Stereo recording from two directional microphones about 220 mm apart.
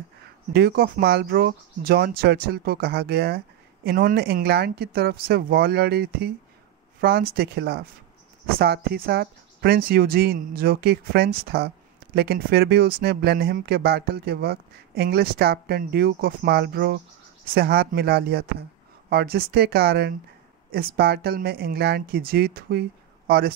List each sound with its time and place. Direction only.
0.5 s speech: 45° right (ahead or behind)